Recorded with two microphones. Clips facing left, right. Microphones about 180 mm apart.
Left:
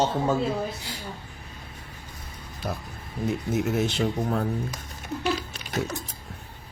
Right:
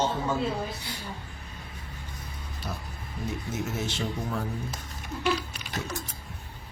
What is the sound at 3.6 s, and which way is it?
Speech, 60° left (ahead or behind).